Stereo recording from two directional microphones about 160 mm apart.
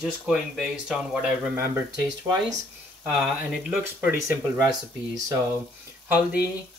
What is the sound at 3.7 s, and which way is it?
Speech, 5° right (ahead or behind).